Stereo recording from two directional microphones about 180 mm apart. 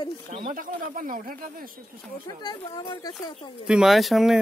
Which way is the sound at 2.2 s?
20° left (ahead or behind).